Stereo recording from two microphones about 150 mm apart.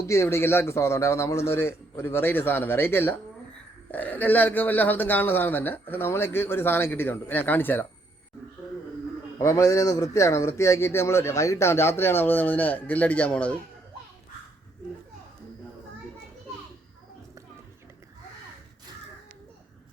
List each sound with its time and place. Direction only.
0.0 s speech: 20° left (ahead or behind)
9.4 s speech: 20° left (ahead or behind)